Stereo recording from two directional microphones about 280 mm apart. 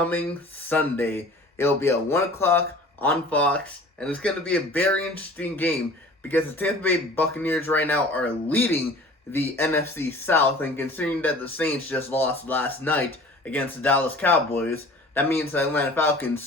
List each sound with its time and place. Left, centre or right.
0.7 s a man's voice: centre